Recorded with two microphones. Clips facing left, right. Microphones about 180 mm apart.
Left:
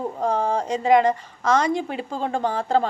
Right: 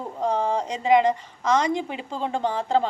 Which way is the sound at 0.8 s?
50° left (ahead or behind).